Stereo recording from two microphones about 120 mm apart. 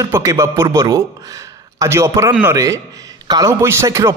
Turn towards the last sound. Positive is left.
turn(degrees=-25)  # may be behind; listen again after turning